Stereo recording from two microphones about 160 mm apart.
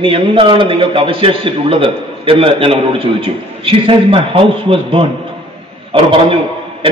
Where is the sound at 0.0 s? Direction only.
35° right (ahead or behind).